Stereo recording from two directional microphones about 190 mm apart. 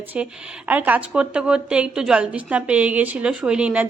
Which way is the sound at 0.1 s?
5° right (ahead or behind).